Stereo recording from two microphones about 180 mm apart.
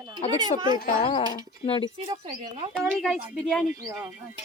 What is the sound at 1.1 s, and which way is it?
Speech, 30° left (ahead or behind).